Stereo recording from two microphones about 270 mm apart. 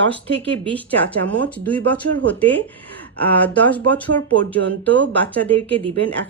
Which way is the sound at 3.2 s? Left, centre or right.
Centre.